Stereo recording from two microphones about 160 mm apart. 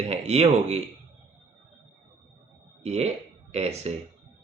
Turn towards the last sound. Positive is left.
turn(degrees=-40)  # may be behind; listen again after turning